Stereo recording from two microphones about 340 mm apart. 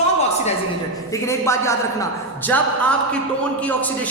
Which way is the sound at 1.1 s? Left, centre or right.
Centre.